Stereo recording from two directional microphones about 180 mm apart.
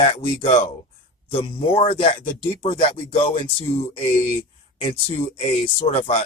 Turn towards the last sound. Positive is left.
turn(degrees=35)  # may be behind; listen again after turning